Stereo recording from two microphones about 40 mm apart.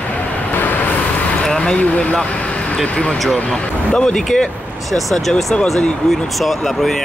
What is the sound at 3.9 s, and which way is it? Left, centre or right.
Speech, centre.